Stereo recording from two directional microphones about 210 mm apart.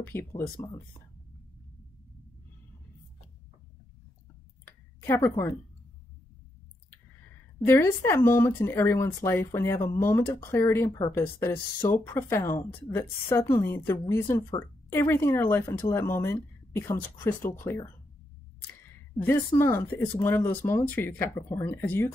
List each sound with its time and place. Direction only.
0.0 s speech: 10° left (ahead or behind)
5.0 s speech: 15° left (ahead or behind)
7.6 s speech: 10° left (ahead or behind)
19.1 s speech: 10° left (ahead or behind)